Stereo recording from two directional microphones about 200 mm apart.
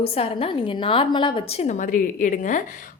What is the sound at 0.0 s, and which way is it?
A woman's voice, 30° left (ahead or behind).